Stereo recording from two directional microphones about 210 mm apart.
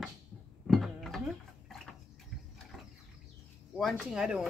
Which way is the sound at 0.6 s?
Centre (ahead or behind).